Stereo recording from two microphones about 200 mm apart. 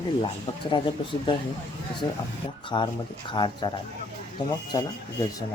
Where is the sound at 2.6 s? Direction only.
25° left (ahead or behind).